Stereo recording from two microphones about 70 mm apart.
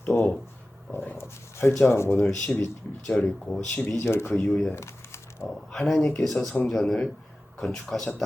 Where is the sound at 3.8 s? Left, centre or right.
Left.